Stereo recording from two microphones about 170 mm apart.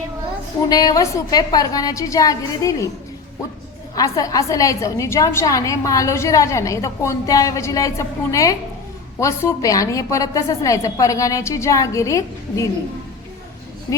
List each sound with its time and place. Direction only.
0.7 s a woman's voice: 20° left (ahead or behind)
3.9 s a woman's voice: 20° left (ahead or behind)